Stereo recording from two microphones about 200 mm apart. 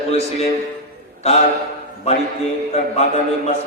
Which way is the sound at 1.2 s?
30° left (ahead or behind).